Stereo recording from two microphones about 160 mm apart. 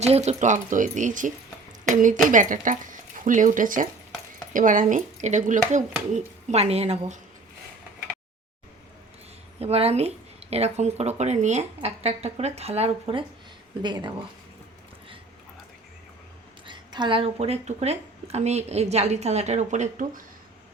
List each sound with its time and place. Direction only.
0.0 s a woman's voice: 45° right (ahead or behind)
9.6 s speech: 40° right (ahead or behind)
16.6 s a woman's voice: 30° right (ahead or behind); by 20.2 s 50° right (ahead or behind)